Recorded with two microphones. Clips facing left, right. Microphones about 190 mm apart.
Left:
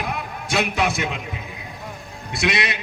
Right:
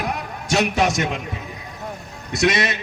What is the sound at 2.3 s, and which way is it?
Speech, 45° right (ahead or behind).